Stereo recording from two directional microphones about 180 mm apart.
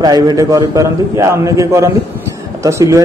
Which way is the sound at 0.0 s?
20° right (ahead or behind).